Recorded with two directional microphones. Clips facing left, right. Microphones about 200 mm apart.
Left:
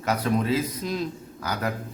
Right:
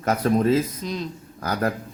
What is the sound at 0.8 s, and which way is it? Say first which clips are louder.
Speech: left 1 dB; 5° left (ahead or behind).